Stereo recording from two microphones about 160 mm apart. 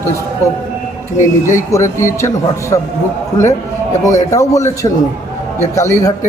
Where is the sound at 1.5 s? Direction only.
15° left (ahead or behind).